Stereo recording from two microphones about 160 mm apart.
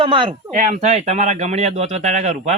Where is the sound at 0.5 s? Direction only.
50° right (ahead or behind).